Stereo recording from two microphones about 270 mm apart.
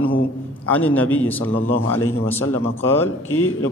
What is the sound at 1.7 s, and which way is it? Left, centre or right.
Speech, left.